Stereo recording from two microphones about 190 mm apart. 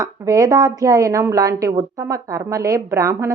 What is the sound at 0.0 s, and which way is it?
Speech, 20° right (ahead or behind).